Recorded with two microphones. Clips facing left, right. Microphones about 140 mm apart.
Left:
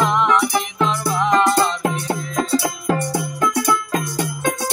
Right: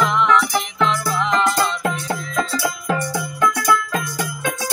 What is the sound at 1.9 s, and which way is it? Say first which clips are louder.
Music: left 1 dB; 35° left (ahead or behind).